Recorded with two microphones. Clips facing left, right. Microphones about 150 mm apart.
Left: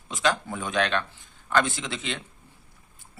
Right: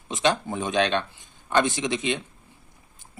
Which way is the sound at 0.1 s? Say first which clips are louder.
Right 2 dB; 20° right (ahead or behind).